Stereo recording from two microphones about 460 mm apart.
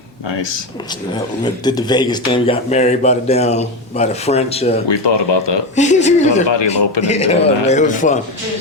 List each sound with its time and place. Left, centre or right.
0.3 s speech: left
1.6 s a man's voice: centre
4.9 s speech: left
5.7 s a man's voice: centre
6.5 s speech: left
7.0 s a man's voice: centre